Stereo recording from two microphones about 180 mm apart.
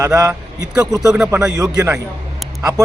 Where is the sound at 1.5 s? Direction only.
20° right (ahead or behind).